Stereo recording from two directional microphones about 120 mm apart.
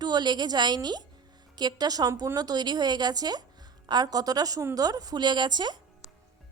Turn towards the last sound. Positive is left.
turn(degrees=-40)  # may be behind; listen again after turning